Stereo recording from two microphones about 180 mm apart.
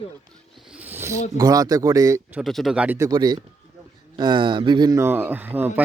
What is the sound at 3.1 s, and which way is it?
A man's voice, 25° right (ahead or behind).